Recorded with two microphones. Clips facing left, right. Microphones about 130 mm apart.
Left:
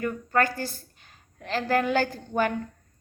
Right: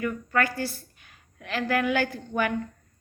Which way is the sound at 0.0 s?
35° left (ahead or behind).